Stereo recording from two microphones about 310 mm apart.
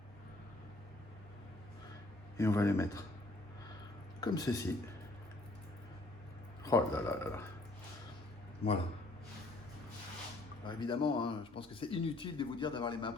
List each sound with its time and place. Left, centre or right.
2.4 s speech: centre
4.2 s speech: centre
6.7 s speech: centre
10.6 s speech: centre